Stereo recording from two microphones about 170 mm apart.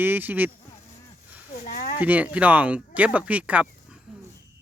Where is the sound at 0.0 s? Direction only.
10° right (ahead or behind).